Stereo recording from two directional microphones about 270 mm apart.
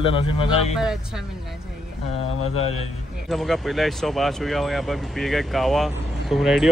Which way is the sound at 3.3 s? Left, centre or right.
Centre.